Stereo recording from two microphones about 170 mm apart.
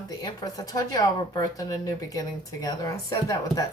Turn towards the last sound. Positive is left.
turn(degrees=20)  # may be behind; listen again after turning